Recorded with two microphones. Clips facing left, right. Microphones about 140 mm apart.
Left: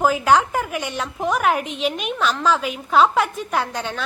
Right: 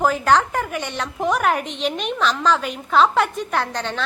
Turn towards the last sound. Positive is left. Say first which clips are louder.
# even
turn(degrees=10)  # may be behind; listen again after turning